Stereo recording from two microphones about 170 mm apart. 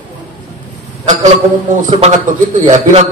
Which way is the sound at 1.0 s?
45° right (ahead or behind).